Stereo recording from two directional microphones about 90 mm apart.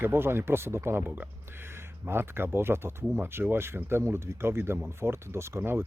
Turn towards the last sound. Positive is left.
turn(degrees=-25)  # may be behind; listen again after turning